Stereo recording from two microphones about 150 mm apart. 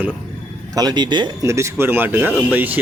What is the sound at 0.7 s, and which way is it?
Speech, 30° right (ahead or behind).